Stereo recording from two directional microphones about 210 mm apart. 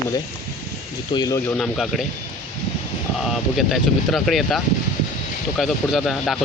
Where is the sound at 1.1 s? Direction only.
15° left (ahead or behind).